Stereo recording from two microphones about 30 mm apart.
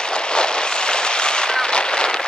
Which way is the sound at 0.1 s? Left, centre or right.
Left.